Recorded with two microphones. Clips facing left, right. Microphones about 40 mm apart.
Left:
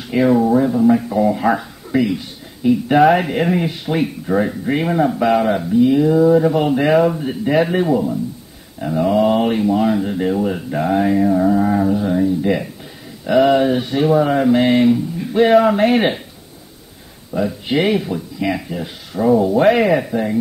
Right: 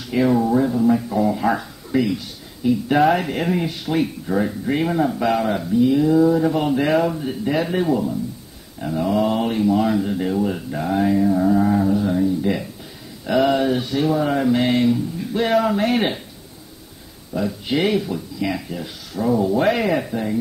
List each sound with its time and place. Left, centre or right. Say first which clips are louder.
0.1 s speech: left 4 dB; centre
13.2 s speech: left 5 dB; centre
17.3 s speech: left 3 dB; centre